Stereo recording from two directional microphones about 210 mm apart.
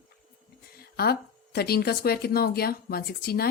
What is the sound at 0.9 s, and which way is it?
Speech, 45° left (ahead or behind).